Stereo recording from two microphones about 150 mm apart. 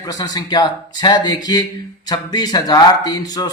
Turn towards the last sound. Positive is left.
turn(degrees=25)  # may be behind; listen again after turning